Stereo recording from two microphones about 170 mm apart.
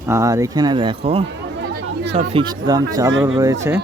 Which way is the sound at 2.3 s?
25° right (ahead or behind).